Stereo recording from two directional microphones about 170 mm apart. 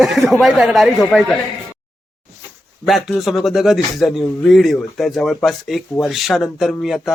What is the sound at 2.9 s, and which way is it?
Speech, centre (ahead or behind).